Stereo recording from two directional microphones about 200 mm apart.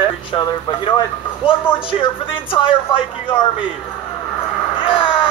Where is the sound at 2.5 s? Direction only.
25° left (ahead or behind).